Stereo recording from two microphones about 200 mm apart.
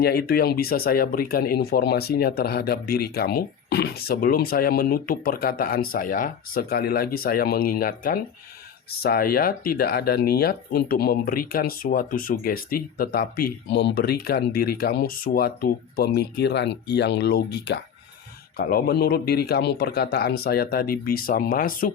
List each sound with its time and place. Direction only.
0.0 s speech: 50° left (ahead or behind)